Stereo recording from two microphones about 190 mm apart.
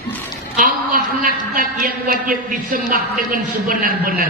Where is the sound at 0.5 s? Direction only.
45° right (ahead or behind).